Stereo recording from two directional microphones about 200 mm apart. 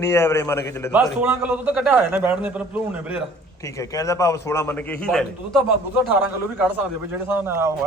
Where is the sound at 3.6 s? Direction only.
15° left (ahead or behind).